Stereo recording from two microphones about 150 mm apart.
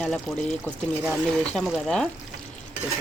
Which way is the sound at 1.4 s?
5° left (ahead or behind).